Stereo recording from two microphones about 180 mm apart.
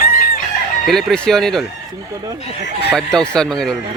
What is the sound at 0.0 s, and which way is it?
Chicken, 50° left (ahead or behind).